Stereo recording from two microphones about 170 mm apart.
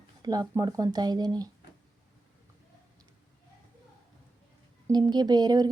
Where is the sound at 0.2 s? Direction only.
20° right (ahead or behind).